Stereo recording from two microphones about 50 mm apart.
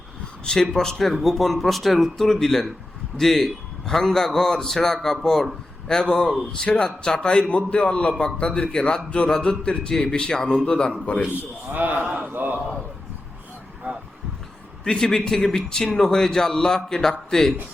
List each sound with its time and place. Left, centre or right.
0.4 s a man's voice: centre
0.9 s a man's voice: centre
6.3 s a man's voice: centre; by 11.3 s left
11.7 s a man's voice: right
12.3 s a man's voice: right
14.8 s a man's voice: centre